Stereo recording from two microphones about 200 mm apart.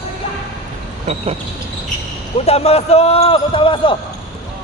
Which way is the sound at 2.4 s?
30° left (ahead or behind).